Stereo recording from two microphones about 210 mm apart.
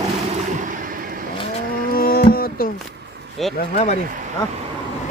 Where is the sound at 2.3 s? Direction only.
45° left (ahead or behind).